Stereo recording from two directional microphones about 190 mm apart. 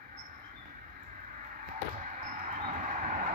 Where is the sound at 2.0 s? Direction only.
45° right (ahead or behind).